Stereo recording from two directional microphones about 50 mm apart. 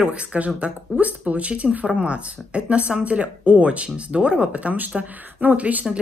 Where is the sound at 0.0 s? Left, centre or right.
Right.